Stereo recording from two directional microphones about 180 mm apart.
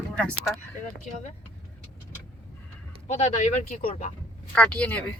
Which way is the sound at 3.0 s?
40° left (ahead or behind).